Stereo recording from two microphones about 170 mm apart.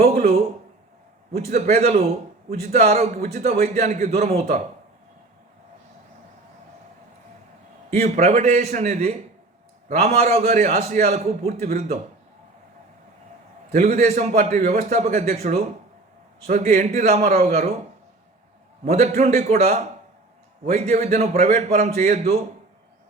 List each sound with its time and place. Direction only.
0.0 s a man's voice: 40° right (ahead or behind)
1.5 s a man's voice: 40° right (ahead or behind)
7.9 s a man's voice: 40° right (ahead or behind)
13.7 s a man's voice: 40° right (ahead or behind)
18.9 s a man's voice: 40° right (ahead or behind)